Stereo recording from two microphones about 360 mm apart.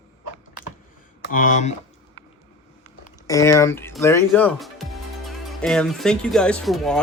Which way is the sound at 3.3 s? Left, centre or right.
Centre.